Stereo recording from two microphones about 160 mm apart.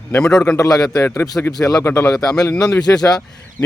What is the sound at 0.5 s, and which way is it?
A man's voice, 25° left (ahead or behind).